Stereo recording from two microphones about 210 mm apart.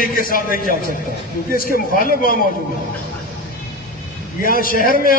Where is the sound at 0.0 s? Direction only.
40° left (ahead or behind).